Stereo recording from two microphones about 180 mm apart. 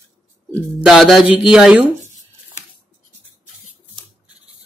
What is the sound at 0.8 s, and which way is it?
Speech, centre (ahead or behind).